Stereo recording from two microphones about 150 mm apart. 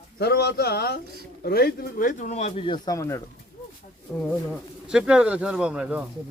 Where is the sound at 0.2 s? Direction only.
90° left; by 4.2 s 15° left (ahead or behind).